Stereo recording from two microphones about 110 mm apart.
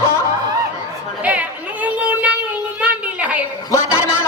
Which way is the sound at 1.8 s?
10° right (ahead or behind).